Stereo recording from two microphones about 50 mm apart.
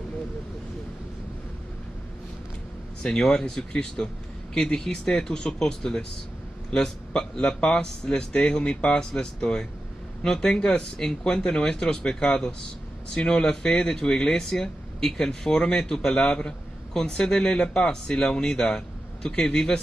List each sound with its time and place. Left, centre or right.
3.2 s speech: centre
16.3 s a man's voice: centre